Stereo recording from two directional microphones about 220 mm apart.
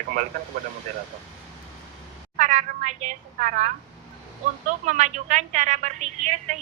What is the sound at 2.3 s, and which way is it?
A woman's voice, 35° right (ahead or behind).